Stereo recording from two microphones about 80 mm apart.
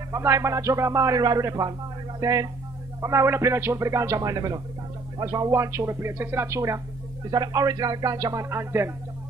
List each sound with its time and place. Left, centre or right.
0.1 s speech: right
1.4 s speech: right
4.2 s speech: right
7.2 s speech: right
8.5 s speech: right